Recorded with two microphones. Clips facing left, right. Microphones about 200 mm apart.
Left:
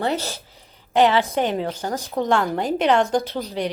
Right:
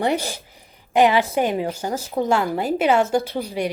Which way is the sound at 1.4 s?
10° right (ahead or behind).